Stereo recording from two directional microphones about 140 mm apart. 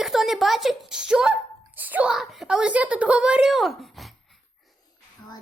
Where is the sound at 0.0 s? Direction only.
Centre (ahead or behind).